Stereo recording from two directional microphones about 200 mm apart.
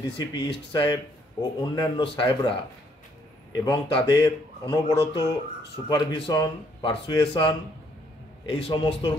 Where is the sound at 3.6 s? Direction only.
20° left (ahead or behind).